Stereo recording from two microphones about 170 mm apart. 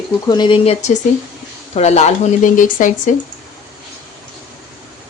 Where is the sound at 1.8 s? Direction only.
40° left (ahead or behind).